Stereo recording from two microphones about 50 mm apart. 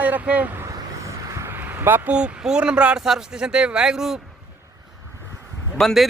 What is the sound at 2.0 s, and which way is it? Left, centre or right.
Speech, right.